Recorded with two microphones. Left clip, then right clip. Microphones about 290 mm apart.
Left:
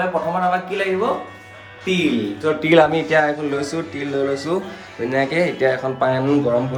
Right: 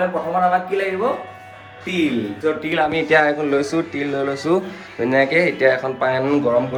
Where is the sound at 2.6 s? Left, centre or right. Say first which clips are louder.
Left 7 dB; left.